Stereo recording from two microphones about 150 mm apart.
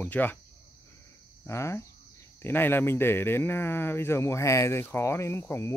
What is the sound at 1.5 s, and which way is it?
Speech, 20° left (ahead or behind).